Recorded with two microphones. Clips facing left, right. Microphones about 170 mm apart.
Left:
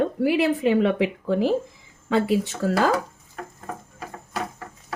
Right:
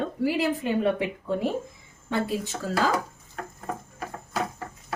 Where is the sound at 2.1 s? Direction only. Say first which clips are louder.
Left 6 dB; 80° left.